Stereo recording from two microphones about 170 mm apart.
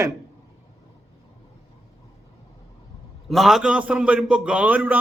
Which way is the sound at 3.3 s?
Centre (ahead or behind).